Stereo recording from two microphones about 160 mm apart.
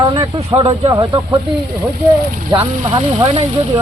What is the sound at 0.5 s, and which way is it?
Speech, 35° right (ahead or behind).